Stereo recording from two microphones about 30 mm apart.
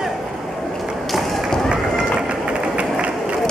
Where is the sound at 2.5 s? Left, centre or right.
Right.